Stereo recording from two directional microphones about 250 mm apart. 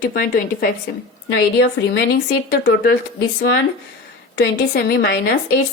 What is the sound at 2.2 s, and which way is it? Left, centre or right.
Speech, left.